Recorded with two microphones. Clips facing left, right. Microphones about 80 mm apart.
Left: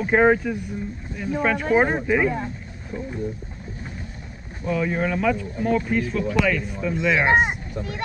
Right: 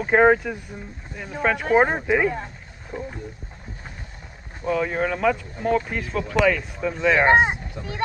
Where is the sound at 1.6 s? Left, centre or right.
Right.